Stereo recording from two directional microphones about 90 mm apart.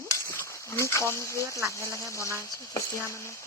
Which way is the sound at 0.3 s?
30° left (ahead or behind).